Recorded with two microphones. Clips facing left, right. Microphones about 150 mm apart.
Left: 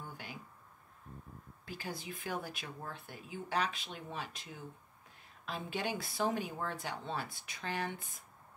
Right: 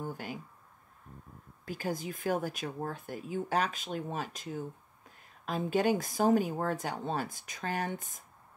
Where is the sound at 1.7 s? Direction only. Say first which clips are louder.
Right 8 dB; 45° right (ahead or behind).